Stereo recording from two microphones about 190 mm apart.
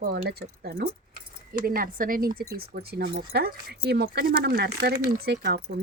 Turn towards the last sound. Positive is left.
turn(degrees=-60)  # may be behind; listen again after turning